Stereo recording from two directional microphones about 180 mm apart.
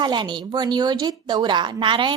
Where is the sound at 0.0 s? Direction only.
25° right (ahead or behind).